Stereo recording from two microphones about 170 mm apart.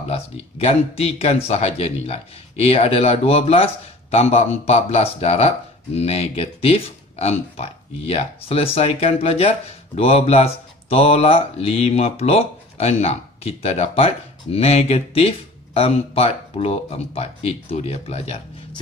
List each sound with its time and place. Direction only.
0.1 s speech: 35° left (ahead or behind)